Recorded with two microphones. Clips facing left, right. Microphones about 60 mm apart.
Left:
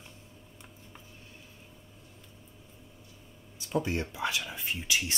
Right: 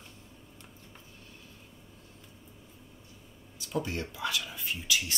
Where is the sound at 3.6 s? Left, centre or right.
Left.